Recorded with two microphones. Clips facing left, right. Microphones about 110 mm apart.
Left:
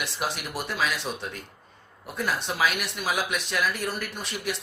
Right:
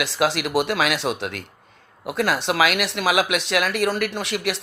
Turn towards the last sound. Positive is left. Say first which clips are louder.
# right 7 dB
turn(degrees=-90)